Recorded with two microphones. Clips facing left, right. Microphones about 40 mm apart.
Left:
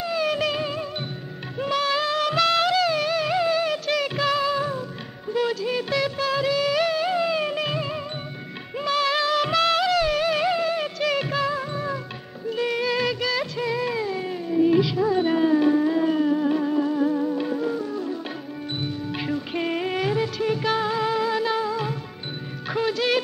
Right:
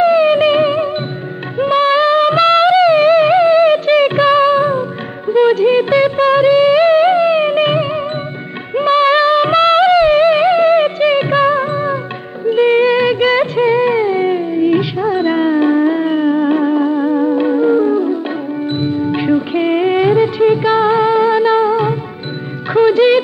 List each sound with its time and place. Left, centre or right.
0.0 s music: right
12.4 s music of bollywood: right
17.2 s music: right
17.5 s music: right